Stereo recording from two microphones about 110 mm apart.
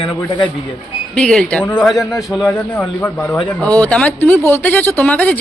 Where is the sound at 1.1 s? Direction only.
5° left (ahead or behind).